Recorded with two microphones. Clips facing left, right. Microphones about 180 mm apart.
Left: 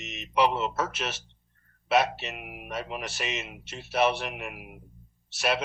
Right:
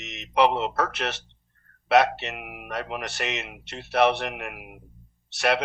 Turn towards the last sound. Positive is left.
turn(degrees=-70)  # may be behind; listen again after turning